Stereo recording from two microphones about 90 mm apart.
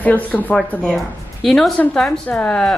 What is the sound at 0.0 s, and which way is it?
Speech, 15° left (ahead or behind).